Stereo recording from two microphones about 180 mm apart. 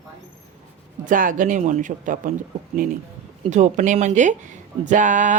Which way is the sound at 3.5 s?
45° right (ahead or behind).